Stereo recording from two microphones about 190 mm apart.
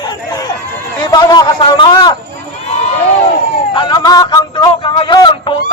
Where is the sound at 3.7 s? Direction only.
25° left (ahead or behind).